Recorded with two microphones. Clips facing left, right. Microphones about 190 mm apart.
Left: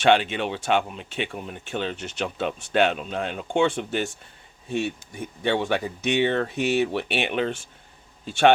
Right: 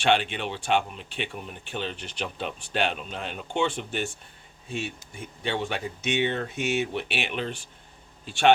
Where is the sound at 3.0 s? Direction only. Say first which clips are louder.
Left 6 dB; 50° left (ahead or behind).